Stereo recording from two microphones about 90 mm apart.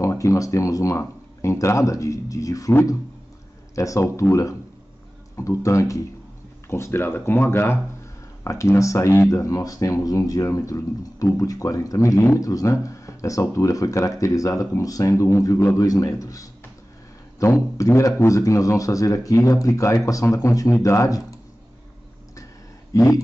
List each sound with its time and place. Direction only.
0.0 s speech: 35° left (ahead or behind)
3.7 s speech: 35° left (ahead or behind)
22.9 s speech: 35° left (ahead or behind)